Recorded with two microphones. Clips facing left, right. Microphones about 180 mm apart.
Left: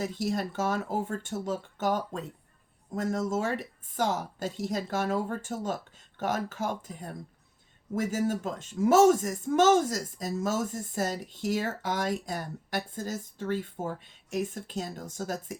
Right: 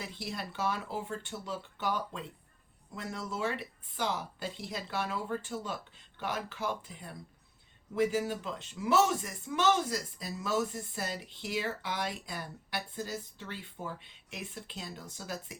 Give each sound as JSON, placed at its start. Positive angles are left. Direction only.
{"t": 0.0, "sound": "speech", "side_deg": 45}